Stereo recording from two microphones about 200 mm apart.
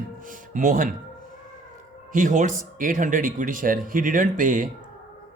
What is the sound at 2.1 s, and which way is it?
Speech, 40° right (ahead or behind).